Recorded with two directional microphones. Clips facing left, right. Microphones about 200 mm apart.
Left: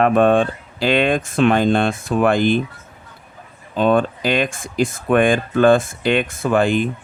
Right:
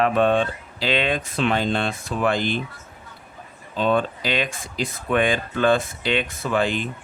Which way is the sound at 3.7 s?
50° left (ahead or behind).